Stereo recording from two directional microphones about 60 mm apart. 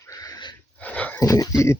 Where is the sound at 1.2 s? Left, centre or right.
Left.